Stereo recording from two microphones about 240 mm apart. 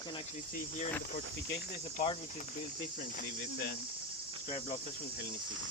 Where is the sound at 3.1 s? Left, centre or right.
Left.